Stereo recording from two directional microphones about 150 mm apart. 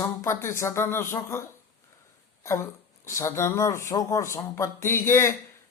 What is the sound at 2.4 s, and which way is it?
Speech, 20° left (ahead or behind).